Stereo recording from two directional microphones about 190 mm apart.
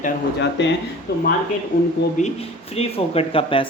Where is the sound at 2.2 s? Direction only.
40° left (ahead or behind).